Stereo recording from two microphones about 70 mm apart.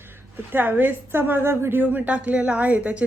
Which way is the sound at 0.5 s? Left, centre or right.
Right.